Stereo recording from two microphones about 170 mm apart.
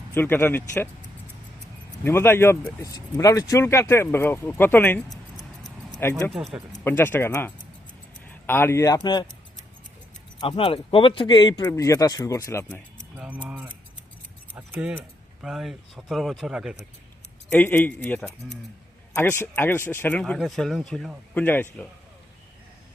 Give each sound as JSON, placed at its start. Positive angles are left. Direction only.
{"t": 0.1, "sound": "speech", "side_deg": 15}
{"t": 2.0, "sound": "speech", "side_deg": 15}
{"t": 6.3, "sound": "speech", "side_deg": 0}
{"t": 6.8, "sound": "speech", "side_deg": 10}
{"t": 10.4, "sound": "speech", "side_deg": 30}
{"t": 13.1, "sound": "keys jangling", "side_deg": -10}
{"t": 14.5, "sound": "speech", "side_deg": -10}
{"t": 17.5, "sound": "speech", "side_deg": 10}
{"t": 21.3, "sound": "speech", "side_deg": 10}